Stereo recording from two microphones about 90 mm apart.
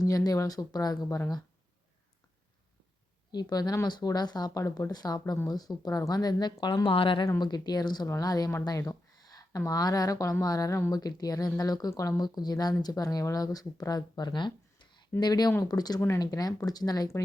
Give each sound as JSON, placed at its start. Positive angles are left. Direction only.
{"t": 0.0, "sound": "speech", "side_deg": 40}
{"t": 3.3, "sound": "speech", "side_deg": 45}
{"t": 6.8, "sound": "speech", "side_deg": 80}
{"t": 7.3, "sound": "speech", "side_deg": 50}
{"t": 10.9, "sound": "speech", "side_deg": 45}